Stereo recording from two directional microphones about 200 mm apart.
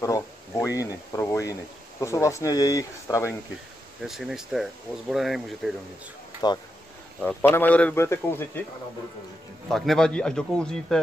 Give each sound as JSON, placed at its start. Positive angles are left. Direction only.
{"t": 0.0, "sound": "speech", "side_deg": 15}
{"t": 4.0, "sound": "speech", "side_deg": 0}
{"t": 7.2, "sound": "speech", "side_deg": 10}
{"t": 9.7, "sound": "speech", "side_deg": 0}